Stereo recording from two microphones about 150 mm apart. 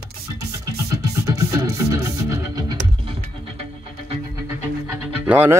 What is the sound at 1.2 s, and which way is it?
Music, 20° right (ahead or behind).